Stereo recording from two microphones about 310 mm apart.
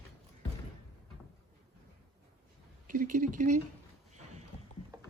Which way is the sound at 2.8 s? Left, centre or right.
Right.